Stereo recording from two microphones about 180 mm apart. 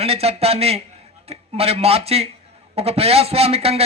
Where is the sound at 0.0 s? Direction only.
35° right (ahead or behind).